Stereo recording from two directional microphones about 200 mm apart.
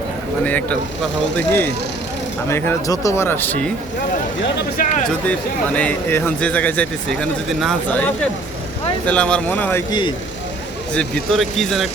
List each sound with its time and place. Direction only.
0.4 s speech: 10° left (ahead or behind)
4.8 s speech: 45° left (ahead or behind)
5.2 s speech: 5° left (ahead or behind)
10.9 s speech: 5° left (ahead or behind)